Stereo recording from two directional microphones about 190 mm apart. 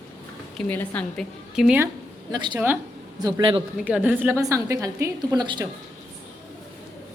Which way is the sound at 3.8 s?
5° right (ahead or behind).